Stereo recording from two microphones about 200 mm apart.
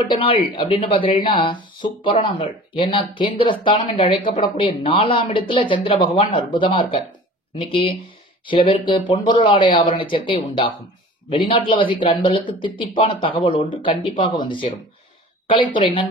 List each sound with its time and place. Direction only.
0.1 s speech: 25° left (ahead or behind)